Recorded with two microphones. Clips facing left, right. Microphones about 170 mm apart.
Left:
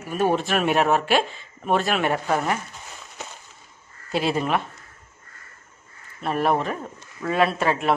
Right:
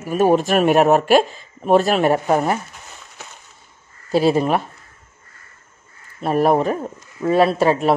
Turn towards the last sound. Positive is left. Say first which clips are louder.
# right 6 dB
turn(degrees=-35)  # may be behind; listen again after turning